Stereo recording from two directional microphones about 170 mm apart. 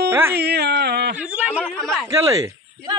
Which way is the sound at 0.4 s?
75° right (ahead or behind).